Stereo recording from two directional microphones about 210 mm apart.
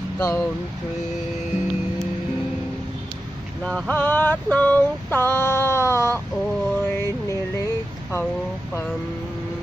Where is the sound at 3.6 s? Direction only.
5° left (ahead or behind).